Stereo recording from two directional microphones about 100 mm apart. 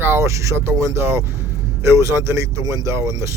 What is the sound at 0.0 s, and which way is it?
Speech, 25° right (ahead or behind).